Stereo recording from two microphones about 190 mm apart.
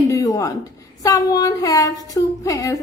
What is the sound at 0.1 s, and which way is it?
A woman's voice, 15° left (ahead or behind).